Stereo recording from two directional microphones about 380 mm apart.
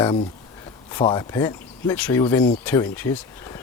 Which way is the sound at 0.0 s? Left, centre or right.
Centre.